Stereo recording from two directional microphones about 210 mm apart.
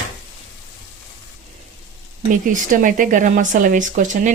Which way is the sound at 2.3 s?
40° right (ahead or behind).